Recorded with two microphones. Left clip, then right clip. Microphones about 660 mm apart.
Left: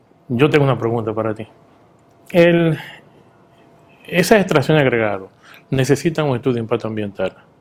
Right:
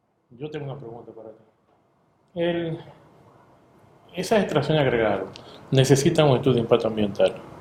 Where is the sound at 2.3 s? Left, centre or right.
Left.